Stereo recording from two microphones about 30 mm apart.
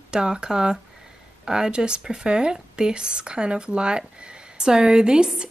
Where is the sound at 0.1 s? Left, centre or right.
Right.